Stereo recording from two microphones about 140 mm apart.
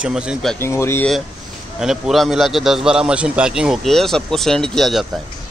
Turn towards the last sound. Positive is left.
turn(degrees=0)  # may be behind; listen again after turning